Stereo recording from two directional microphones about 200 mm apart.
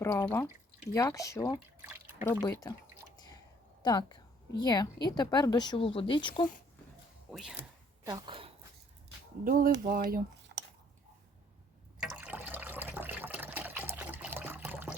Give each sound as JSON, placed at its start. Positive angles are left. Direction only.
{"t": 0.0, "sound": "speech", "side_deg": 10}
{"t": 3.8, "sound": "a woman's voice", "side_deg": 20}
{"t": 7.3, "sound": "speech", "side_deg": 0}
{"t": 8.0, "sound": "speech", "side_deg": -20}
{"t": 9.4, "sound": "speech", "side_deg": -45}
{"t": 11.9, "sound": "water", "side_deg": -5}